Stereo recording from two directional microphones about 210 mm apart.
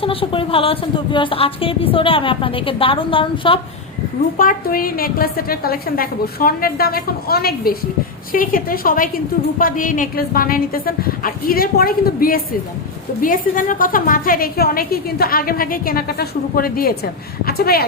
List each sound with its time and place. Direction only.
0.0 s speech: 25° left (ahead or behind)
4.4 s a woman's voice: 40° left (ahead or behind)